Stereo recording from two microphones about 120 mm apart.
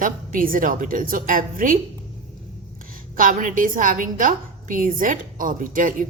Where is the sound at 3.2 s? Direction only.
90° right.